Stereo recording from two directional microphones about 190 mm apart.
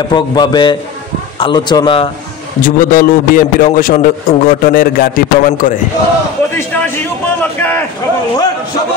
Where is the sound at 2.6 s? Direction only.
45° left (ahead or behind).